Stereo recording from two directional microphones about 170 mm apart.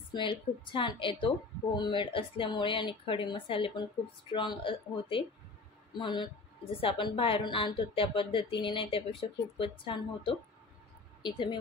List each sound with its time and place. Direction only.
0.1 s a woman's voice: 30° left (ahead or behind)